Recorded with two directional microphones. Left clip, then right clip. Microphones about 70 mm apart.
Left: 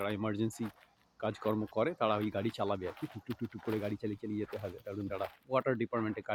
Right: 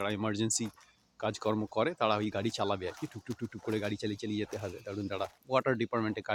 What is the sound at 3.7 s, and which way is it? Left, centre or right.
Speech, right.